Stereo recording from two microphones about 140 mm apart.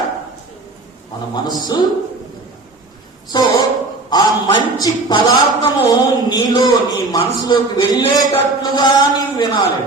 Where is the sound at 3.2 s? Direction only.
30° left (ahead or behind).